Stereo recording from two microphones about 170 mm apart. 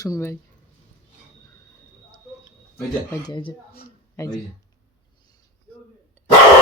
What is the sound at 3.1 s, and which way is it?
Speech, 25° left (ahead or behind).